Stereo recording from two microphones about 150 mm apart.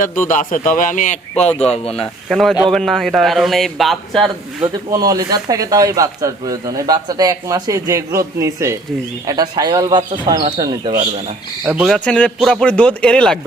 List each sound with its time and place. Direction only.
0.0 s a man's voice: 60° left (ahead or behind)
1.6 s speech: 45° left (ahead or behind)
2.3 s a man's voice: centre (ahead or behind)
4.9 s speech: 25° right (ahead or behind)
11.6 s a man's voice: 5° right (ahead or behind)
11.9 s speech: 5° left (ahead or behind)